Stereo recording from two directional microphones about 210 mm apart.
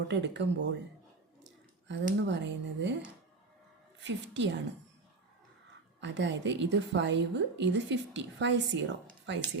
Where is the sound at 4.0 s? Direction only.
55° right (ahead or behind).